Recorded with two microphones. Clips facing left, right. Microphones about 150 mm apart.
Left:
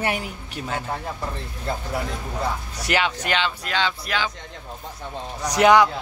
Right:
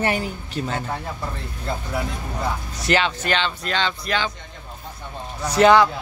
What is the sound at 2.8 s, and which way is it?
Speech, 10° left (ahead or behind).